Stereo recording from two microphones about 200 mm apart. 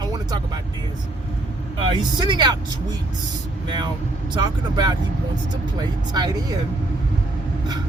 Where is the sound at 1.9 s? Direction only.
25° right (ahead or behind).